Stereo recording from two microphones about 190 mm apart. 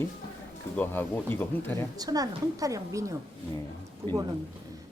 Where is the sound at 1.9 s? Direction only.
20° right (ahead or behind).